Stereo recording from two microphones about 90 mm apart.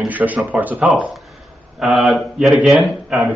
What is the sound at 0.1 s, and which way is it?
Speech, 20° right (ahead or behind).